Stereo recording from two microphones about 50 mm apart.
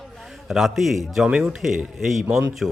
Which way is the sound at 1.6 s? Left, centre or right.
Centre.